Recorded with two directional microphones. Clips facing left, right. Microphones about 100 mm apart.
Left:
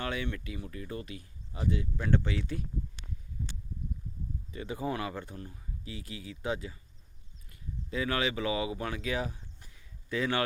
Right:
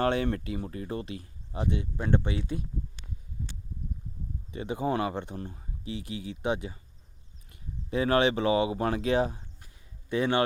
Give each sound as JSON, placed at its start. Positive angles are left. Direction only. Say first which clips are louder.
{"t": 0.0, "sound": "speech", "louder": "right 8 dB", "side_deg": -40}
{"t": 4.5, "sound": "speech", "louder": "right 6 dB", "side_deg": -20}